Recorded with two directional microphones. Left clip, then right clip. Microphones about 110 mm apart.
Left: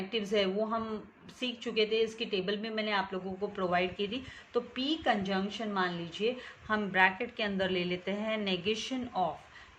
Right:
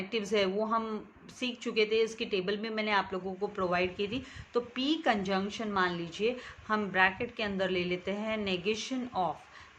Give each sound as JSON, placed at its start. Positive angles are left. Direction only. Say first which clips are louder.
{"t": 0.1, "sound": "a woman's voice", "louder": "right 1 dB", "side_deg": -25}
{"t": 3.5, "sound": "a woman's voice", "louder": "even", "side_deg": -15}
{"t": 6.7, "sound": "speech", "louder": "even", "side_deg": -10}